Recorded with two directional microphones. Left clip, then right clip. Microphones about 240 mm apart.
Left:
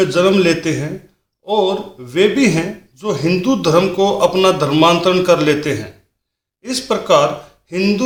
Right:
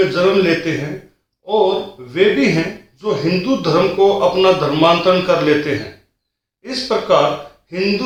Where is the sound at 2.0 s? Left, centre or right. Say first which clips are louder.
Left 1 dB; left.